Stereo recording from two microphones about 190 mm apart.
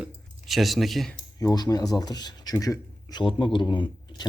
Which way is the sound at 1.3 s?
20° left (ahead or behind).